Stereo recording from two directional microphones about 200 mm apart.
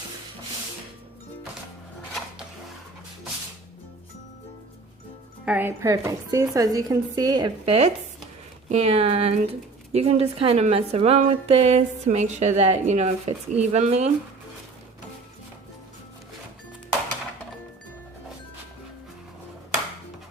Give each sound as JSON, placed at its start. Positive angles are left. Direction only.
{"t": 5.5, "sound": "a woman's voice", "side_deg": -10}